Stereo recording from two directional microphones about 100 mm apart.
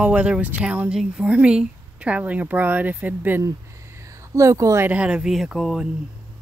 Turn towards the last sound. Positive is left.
turn(degrees=-5)  # may be behind; listen again after turning